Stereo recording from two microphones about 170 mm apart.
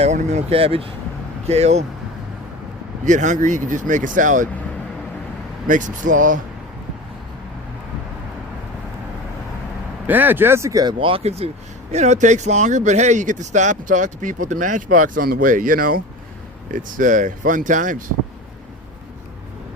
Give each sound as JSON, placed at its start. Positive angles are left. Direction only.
{"t": 0.0, "sound": "speech", "side_deg": -45}
{"t": 3.1, "sound": "speech", "side_deg": -45}
{"t": 5.6, "sound": "speech", "side_deg": -50}
{"t": 10.1, "sound": "speech", "side_deg": -10}